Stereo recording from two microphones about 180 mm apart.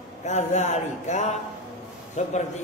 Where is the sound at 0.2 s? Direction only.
40° left (ahead or behind).